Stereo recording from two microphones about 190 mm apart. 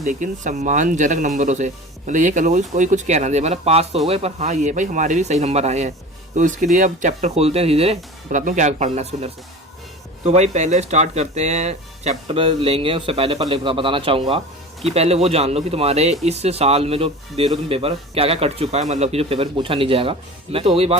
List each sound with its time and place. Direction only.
0.0 s a man's voice: 40° right (ahead or behind)